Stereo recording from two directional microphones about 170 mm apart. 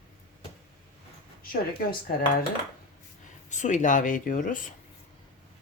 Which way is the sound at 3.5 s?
45° left (ahead or behind).